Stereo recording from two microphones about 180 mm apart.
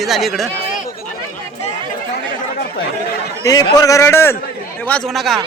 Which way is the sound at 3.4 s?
20° left (ahead or behind).